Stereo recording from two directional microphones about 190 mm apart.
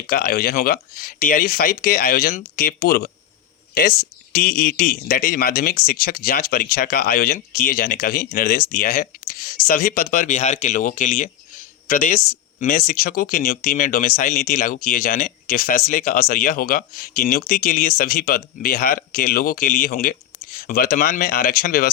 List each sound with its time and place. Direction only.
0.1 s speech: 50° left (ahead or behind)